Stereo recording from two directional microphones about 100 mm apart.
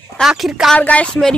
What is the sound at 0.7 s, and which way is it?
Speech, 15° left (ahead or behind).